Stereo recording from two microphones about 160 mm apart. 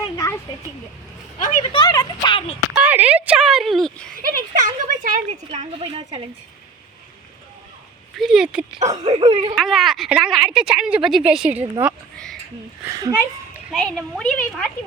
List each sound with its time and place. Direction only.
1.4 s speech: 50° left (ahead or behind)
1.7 s speech: 25° left (ahead or behind)
2.7 s a sound: 10° right (ahead or behind)
3.2 s speech: 5° right (ahead or behind)
4.2 s speech: 60° right (ahead or behind)
5.5 s a woman's voice: 35° right (ahead or behind)
8.2 s speech: 5° right (ahead or behind)
9.0 s a woman's voice: 40° right (ahead or behind)
9.6 s speech: centre (ahead or behind)
12.8 s speech: 20° right (ahead or behind)
13.7 s speech: centre (ahead or behind)